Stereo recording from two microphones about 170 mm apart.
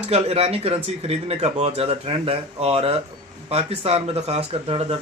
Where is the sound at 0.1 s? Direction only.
35° right (ahead or behind).